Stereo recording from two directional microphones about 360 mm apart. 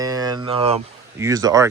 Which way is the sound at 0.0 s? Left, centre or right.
Centre.